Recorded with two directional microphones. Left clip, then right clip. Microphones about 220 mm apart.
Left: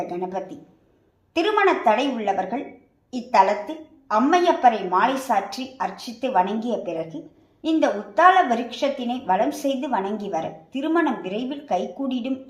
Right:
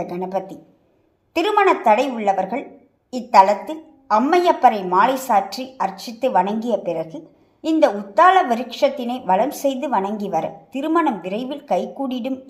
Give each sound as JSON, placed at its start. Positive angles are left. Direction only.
{"t": 0.1, "sound": "a woman's voice", "side_deg": -35}